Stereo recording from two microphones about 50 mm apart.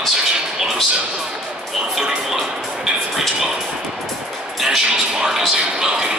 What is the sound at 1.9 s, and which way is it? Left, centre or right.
Speech, centre.